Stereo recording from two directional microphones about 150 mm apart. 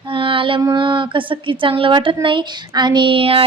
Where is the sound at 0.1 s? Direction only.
35° right (ahead or behind).